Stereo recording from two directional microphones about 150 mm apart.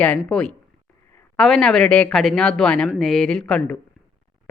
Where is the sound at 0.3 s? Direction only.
5° left (ahead or behind).